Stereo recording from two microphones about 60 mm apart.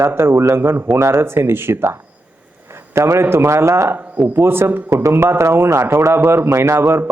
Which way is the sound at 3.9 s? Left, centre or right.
Right.